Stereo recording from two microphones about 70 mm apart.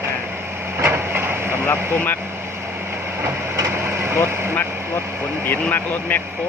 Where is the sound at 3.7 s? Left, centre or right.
Right.